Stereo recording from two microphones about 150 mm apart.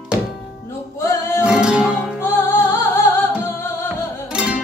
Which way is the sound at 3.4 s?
15° left (ahead or behind).